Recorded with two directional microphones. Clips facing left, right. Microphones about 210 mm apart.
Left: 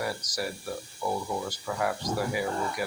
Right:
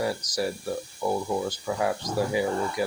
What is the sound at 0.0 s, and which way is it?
Speech, 25° right (ahead or behind).